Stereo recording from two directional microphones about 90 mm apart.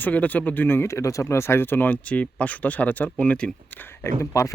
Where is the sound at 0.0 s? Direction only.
20° left (ahead or behind).